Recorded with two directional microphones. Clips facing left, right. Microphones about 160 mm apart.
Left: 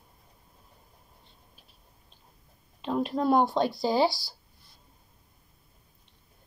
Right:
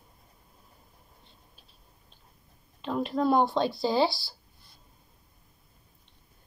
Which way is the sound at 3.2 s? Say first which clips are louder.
Even; 5° left (ahead or behind).